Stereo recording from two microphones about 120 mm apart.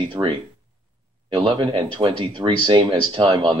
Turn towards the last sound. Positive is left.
turn(degrees=-40)  # may be behind; listen again after turning